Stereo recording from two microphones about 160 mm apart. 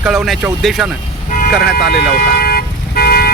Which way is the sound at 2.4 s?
70° left (ahead or behind).